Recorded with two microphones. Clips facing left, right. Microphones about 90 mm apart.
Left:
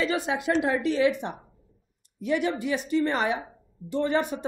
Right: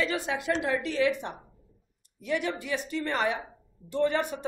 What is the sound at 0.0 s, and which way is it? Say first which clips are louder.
A woman's voice: left 3 dB; 20° left (ahead or behind).